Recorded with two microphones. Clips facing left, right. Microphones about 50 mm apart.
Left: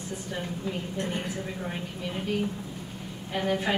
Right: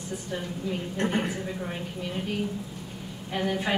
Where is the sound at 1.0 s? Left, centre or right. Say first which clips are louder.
Right 6 dB; right.